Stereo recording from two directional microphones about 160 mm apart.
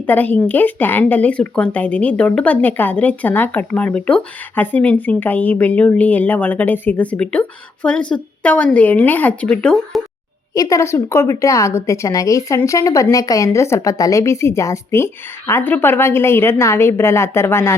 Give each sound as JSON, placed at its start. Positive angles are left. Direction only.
{"t": 0.1, "sound": "speech", "side_deg": 10}
{"t": 10.5, "sound": "speech", "side_deg": 20}